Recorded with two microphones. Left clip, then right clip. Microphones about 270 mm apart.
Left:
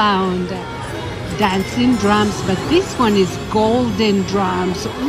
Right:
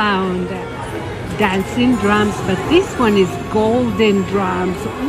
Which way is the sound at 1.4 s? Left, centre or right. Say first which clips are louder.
Right 1 dB; centre.